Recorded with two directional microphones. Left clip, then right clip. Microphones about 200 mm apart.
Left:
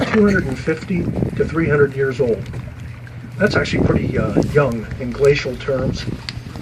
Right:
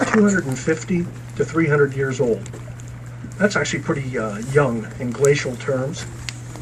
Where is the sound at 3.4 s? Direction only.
50° left (ahead or behind).